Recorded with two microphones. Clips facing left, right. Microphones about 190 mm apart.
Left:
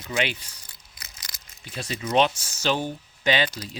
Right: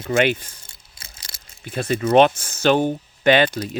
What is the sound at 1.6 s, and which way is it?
Speech, 55° right (ahead or behind).